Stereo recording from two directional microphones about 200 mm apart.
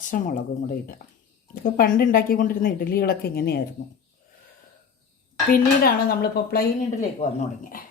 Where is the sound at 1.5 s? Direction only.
45° left (ahead or behind).